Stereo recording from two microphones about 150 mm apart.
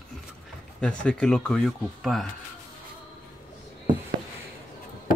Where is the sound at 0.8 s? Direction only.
5° left (ahead or behind).